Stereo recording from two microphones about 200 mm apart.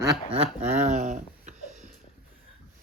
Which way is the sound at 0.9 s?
35° right (ahead or behind).